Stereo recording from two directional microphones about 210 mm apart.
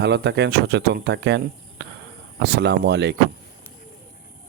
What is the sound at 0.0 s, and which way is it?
Speech, 55° right (ahead or behind).